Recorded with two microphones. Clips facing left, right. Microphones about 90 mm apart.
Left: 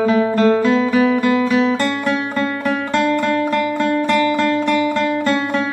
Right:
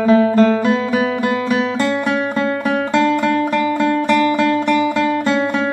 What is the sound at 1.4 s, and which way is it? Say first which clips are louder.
Music: left 1 dB; 15° right (ahead or behind).